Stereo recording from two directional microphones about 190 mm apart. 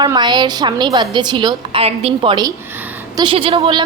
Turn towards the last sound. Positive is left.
turn(degrees=-25)  # may be behind; listen again after turning